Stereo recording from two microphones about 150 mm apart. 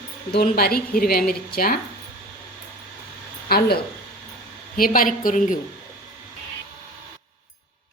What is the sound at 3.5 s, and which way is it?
Speech, 90° left.